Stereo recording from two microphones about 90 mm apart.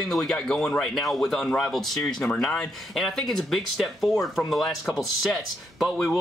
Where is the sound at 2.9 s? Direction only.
Centre (ahead or behind).